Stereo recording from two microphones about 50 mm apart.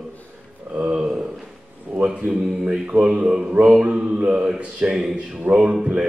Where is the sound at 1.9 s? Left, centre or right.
Centre.